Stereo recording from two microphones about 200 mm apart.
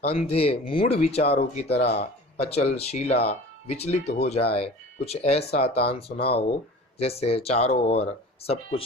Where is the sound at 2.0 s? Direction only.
30° left (ahead or behind).